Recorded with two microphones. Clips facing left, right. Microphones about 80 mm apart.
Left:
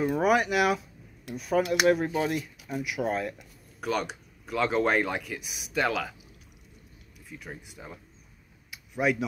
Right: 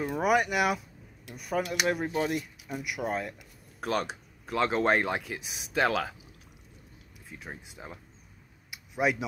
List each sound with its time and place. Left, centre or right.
0.0 s speech: centre
3.8 s speech: right
7.2 s speech: right
8.9 s speech: centre